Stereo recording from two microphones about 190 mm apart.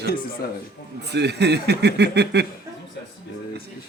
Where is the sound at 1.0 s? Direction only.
60° right (ahead or behind).